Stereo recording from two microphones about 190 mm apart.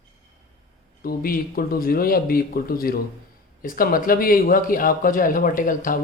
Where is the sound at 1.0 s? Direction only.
50° left (ahead or behind).